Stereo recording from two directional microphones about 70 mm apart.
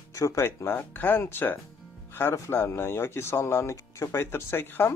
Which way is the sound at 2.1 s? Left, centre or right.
Left.